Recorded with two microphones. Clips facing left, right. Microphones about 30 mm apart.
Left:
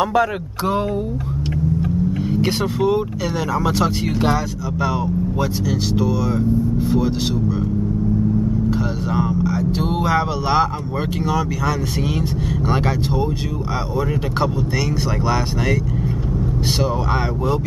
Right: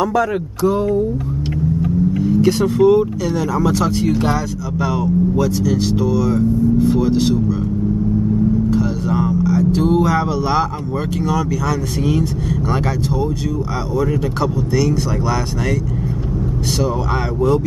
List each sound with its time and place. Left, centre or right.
1.8 s vehicle: left
2.6 s speech: centre
5.7 s speech: centre
8.6 s speech: centre
13.9 s speech: left